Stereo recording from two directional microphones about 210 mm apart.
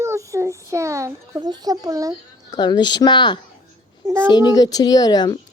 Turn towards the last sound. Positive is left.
turn(degrees=20)  # may be behind; listen again after turning